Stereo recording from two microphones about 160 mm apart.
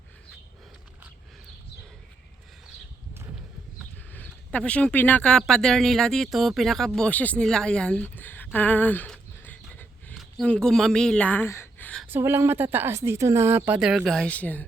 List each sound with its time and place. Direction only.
3.9 s speech: 10° left (ahead or behind)
12.0 s speech: 15° right (ahead or behind); by 14.7 s 10° left (ahead or behind)